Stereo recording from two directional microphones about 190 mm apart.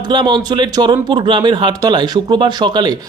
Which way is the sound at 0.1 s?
20° right (ahead or behind).